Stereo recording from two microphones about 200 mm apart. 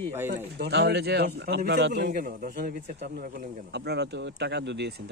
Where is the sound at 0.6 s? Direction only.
55° right (ahead or behind).